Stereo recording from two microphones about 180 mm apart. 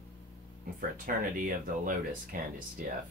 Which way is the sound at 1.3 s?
50° right (ahead or behind).